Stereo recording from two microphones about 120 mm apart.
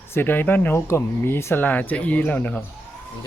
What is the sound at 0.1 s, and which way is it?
Speech, 15° left (ahead or behind).